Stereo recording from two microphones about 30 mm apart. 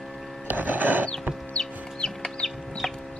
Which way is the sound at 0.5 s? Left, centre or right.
Right.